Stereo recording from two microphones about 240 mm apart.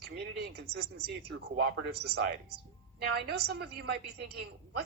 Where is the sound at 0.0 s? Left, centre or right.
Right.